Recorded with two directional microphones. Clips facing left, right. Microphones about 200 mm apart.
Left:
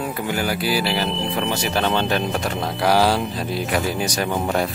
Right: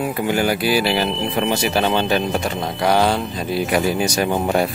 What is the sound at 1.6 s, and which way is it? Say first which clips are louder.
Speech: right 2 dB; 5° right (ahead or behind).